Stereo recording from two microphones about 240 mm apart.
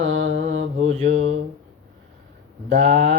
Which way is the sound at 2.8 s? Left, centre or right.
Right.